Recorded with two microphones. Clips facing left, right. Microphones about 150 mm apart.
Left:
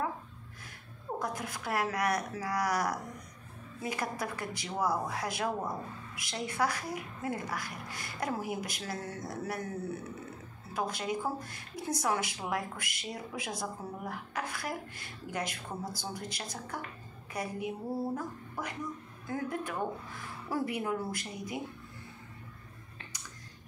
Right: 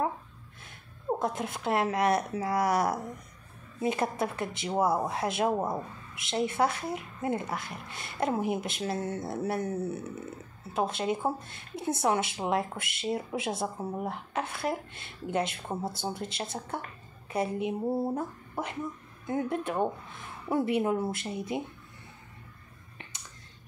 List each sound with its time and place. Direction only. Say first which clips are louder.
1.2 s speech: right 6 dB; 25° right (ahead or behind)